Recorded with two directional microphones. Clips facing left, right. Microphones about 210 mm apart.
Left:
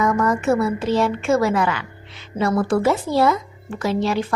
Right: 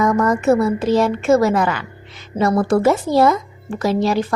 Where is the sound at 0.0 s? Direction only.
40° right (ahead or behind).